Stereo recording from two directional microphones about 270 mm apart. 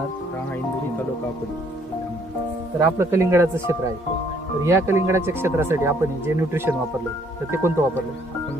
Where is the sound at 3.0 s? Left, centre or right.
Centre.